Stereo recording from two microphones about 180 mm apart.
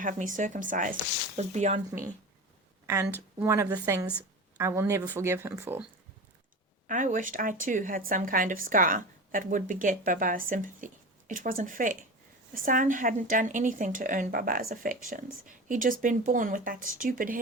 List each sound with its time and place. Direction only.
0.0 s speech: 45° right (ahead or behind)
2.8 s a woman's voice: 15° right (ahead or behind)
6.8 s speech: 45° right (ahead or behind)